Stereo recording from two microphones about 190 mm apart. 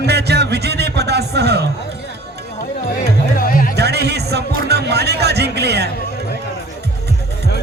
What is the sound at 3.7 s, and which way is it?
Music, 60° right (ahead or behind).